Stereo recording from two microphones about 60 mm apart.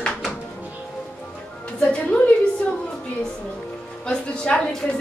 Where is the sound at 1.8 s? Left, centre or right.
Centre.